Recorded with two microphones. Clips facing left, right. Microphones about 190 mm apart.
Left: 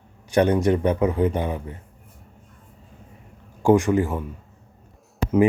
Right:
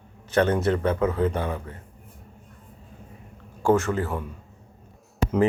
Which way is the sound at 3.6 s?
15° left (ahead or behind).